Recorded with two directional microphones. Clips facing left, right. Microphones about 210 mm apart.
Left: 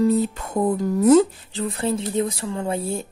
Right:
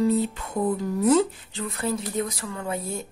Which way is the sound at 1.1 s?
35° left (ahead or behind).